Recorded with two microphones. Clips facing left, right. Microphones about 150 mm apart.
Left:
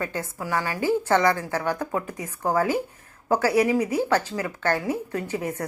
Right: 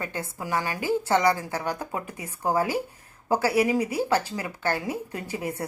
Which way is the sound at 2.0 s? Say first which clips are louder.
Left 4 dB; 30° left (ahead or behind).